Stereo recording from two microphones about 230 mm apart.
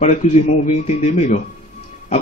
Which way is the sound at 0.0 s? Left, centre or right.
Left.